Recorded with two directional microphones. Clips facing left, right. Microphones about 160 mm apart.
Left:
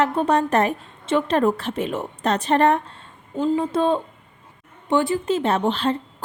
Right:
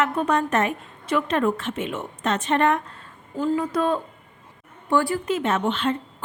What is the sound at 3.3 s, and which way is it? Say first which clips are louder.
A woman's voice: left 2 dB; 20° left (ahead or behind).